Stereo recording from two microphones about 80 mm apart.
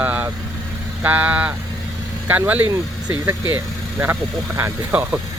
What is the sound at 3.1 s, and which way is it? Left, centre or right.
Speech, right.